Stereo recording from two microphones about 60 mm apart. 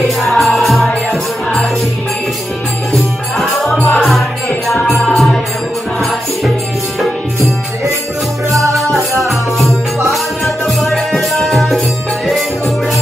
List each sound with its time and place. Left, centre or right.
0.0 s music: centre
2.9 s music: centre
5.0 s music: centre
8.8 s music: right
9.3 s music: centre